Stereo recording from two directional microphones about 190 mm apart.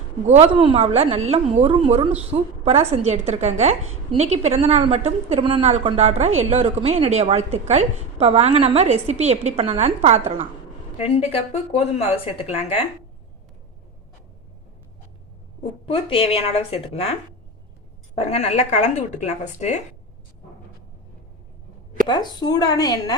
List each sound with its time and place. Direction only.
0.3 s a woman's voice: 35° right (ahead or behind)
10.9 s a woman's voice: 35° left (ahead or behind)
15.9 s a woman's voice: 30° left (ahead or behind)
22.0 s a woman's voice: 20° left (ahead or behind)